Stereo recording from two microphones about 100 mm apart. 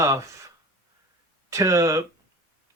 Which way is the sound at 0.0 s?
30° right (ahead or behind).